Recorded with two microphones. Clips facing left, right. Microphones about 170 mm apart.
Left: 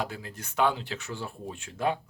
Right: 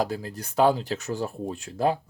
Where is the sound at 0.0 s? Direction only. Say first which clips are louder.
Right 7 dB; 35° right (ahead or behind).